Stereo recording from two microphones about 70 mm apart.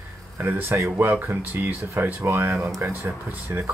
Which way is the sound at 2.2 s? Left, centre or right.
Right.